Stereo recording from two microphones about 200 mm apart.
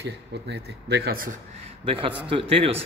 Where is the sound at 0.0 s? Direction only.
60° right (ahead or behind).